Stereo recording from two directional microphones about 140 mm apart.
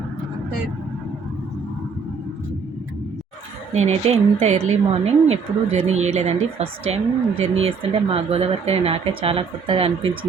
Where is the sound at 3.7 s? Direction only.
50° right (ahead or behind).